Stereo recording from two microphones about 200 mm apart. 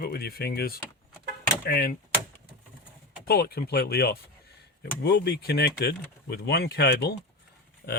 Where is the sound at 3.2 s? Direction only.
50° left (ahead or behind).